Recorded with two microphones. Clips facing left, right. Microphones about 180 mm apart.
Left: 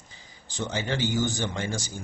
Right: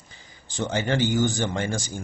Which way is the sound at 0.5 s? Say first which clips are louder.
Right 5 dB; 50° right (ahead or behind).